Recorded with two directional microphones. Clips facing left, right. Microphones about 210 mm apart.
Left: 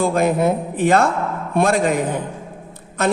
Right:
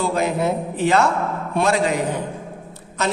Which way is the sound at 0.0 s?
50° left (ahead or behind).